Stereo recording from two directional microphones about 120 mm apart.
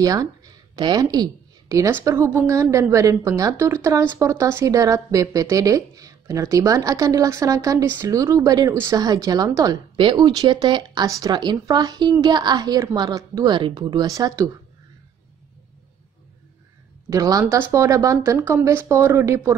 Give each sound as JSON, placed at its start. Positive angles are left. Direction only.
{"t": 0.0, "sound": "a woman's voice", "side_deg": -30}
{"t": 1.7, "sound": "a woman's voice", "side_deg": -20}
{"t": 13.5, "sound": "a woman's voice", "side_deg": -40}
{"t": 17.1, "sound": "speech", "side_deg": -30}